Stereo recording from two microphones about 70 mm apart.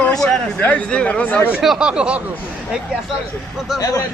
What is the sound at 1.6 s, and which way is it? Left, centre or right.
Speech, centre.